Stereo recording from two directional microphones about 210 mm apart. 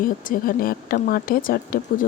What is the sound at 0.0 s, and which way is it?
A woman's voice, 40° left (ahead or behind).